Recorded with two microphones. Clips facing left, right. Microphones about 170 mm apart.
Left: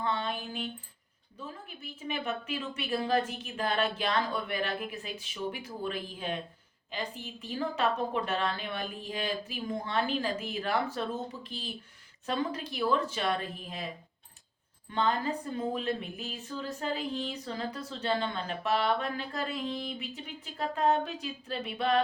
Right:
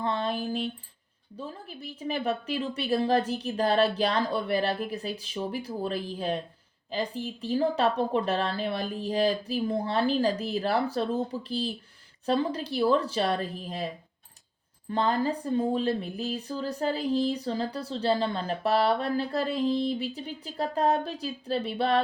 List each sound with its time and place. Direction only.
0.0 s speech: 35° right (ahead or behind)
14.8 s speech: 35° right (ahead or behind)